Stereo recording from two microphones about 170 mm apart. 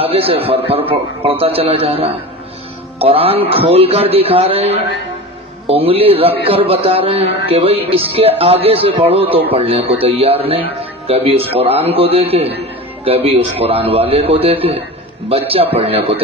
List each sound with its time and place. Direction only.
0.0 s a man's voice: 35° right (ahead or behind)